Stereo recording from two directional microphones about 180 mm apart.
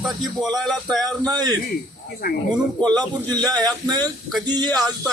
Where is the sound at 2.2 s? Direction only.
55° left (ahead or behind).